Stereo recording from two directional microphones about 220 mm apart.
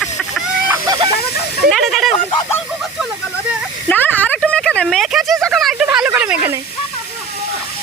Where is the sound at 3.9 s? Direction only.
5° left (ahead or behind).